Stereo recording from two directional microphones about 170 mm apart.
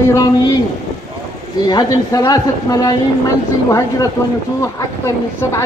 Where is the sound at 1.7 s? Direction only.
20° left (ahead or behind).